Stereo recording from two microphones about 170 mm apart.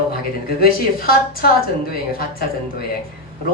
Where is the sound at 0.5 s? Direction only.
60° left (ahead or behind).